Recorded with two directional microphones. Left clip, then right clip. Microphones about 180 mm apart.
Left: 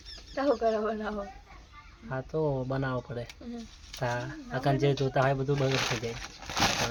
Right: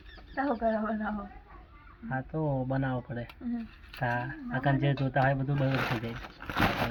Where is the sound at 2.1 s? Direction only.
20° left (ahead or behind).